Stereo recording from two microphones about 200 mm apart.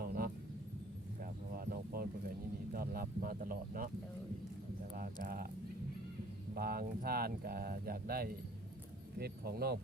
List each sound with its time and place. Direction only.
0.0 s a sound: 50° right (ahead or behind)
2.7 s speech: 45° right (ahead or behind)
4.9 s speech: 45° right (ahead or behind)
6.5 s speech: 50° right (ahead or behind)